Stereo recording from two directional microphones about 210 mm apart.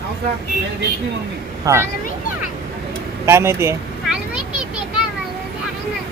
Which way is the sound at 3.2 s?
10° right (ahead or behind).